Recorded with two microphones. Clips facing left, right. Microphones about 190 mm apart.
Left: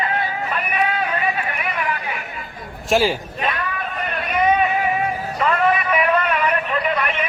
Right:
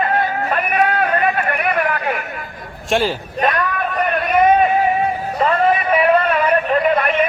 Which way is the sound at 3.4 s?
50° right (ahead or behind).